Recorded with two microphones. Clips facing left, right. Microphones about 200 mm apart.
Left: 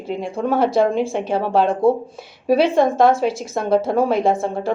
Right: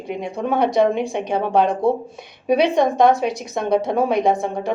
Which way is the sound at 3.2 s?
5° left (ahead or behind).